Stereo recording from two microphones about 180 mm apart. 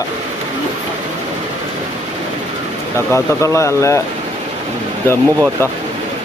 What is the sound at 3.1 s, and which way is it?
Speech, 15° left (ahead or behind).